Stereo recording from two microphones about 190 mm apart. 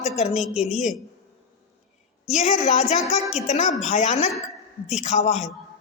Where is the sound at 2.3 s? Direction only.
35° left (ahead or behind).